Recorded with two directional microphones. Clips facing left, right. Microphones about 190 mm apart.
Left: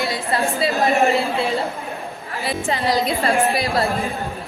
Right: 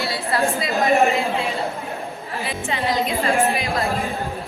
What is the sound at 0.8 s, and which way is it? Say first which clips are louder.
A woman's voice: right 1 dB; 35° left (ahead or behind).